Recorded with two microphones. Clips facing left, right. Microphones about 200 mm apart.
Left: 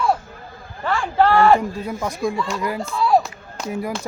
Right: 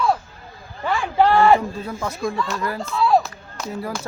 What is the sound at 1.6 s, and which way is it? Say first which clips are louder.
Speech: left 2 dB; 10° left (ahead or behind).